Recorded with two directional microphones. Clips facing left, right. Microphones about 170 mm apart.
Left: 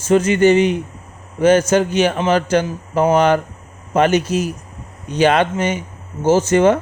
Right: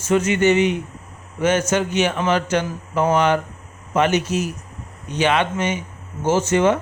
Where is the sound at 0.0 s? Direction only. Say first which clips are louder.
Left 4 dB; 35° left (ahead or behind).